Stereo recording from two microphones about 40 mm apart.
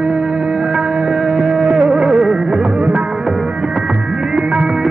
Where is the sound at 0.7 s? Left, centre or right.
Right.